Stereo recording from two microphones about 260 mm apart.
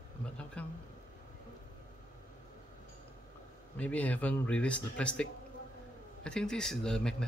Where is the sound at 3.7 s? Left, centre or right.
Centre.